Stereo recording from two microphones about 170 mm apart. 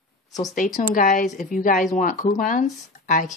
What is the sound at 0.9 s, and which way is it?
Speech, 50° left (ahead or behind).